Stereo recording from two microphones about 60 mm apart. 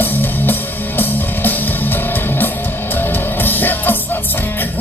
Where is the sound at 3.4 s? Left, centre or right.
Left.